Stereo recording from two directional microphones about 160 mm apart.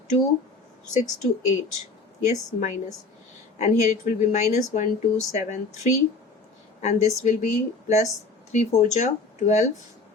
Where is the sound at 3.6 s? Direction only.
50° left (ahead or behind).